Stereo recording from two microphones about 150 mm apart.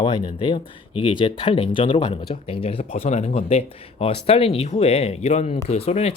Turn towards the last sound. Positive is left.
turn(degrees=45)  # may be behind; listen again after turning